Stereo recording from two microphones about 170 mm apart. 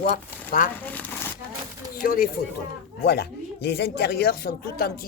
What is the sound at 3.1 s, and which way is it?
Speech, 75° left (ahead or behind).